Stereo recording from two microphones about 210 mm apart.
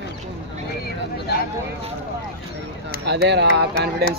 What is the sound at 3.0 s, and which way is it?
Speech, 55° right (ahead or behind).